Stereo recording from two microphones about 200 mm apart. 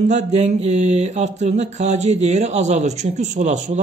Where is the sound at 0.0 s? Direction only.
35° right (ahead or behind).